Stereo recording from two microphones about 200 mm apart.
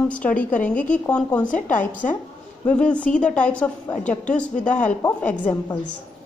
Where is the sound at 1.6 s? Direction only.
40° left (ahead or behind).